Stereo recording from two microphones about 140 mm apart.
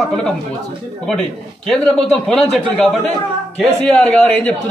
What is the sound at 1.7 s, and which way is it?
A man's voice, 5° left (ahead or behind).